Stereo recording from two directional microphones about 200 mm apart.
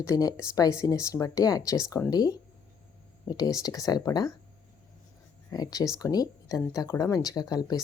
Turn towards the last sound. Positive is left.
turn(degrees=20)  # may be behind; listen again after turning